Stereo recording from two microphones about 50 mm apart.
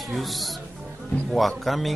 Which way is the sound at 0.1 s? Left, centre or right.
Centre.